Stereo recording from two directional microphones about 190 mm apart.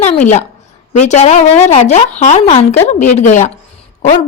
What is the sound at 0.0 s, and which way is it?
A woman's voice, 40° left (ahead or behind).